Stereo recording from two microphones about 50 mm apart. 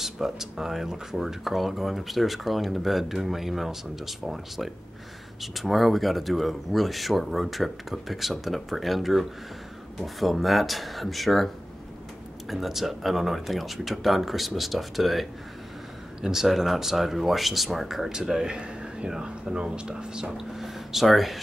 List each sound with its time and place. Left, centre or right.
0.0 s speech: centre
20.3 s speech: centre